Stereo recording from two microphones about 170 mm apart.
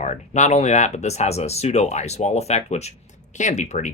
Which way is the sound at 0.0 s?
45° left (ahead or behind).